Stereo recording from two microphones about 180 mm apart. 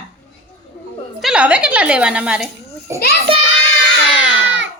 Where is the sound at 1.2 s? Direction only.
5° right (ahead or behind).